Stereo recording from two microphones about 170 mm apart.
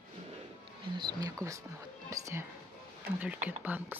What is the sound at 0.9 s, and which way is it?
Speech, 20° right (ahead or behind).